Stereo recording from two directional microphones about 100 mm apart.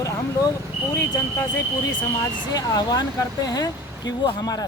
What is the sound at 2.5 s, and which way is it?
Speech, 40° left (ahead or behind).